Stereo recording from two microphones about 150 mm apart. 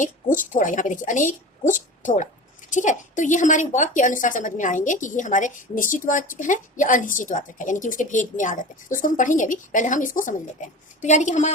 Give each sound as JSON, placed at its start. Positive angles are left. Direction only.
{"t": 0.0, "sound": "a woman's voice", "side_deg": 60}
{"t": 11.0, "sound": "a woman's voice", "side_deg": 50}